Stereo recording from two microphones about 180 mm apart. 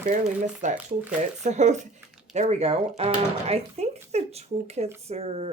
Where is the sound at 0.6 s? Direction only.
40° right (ahead or behind).